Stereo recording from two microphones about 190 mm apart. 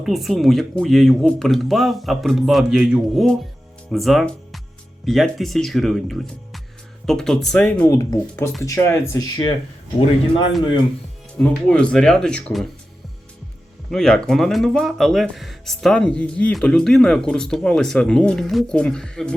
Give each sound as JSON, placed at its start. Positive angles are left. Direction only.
{"t": 0.0, "sound": "speech", "side_deg": 0}
{"t": 7.9, "sound": "speech", "side_deg": 15}
{"t": 11.3, "sound": "speech", "side_deg": 5}
{"t": 13.9, "sound": "speech", "side_deg": 5}